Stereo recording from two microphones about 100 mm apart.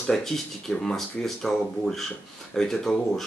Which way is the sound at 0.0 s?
5° left (ahead or behind).